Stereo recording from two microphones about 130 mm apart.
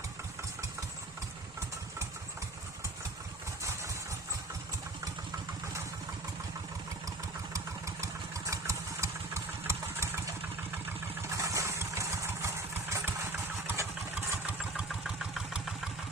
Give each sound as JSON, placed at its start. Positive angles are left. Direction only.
{"t": 7.5, "sound": "engine", "side_deg": -25}
{"t": 11.3, "sound": "vehicle", "side_deg": -25}
{"t": 14.6, "sound": "vehicle", "side_deg": -5}